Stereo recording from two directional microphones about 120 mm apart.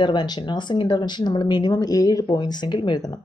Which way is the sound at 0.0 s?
40° left (ahead or behind).